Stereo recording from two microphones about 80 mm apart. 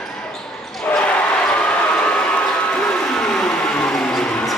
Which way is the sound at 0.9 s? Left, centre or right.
Centre.